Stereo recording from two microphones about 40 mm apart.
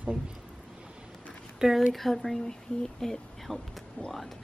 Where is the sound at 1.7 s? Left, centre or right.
Centre.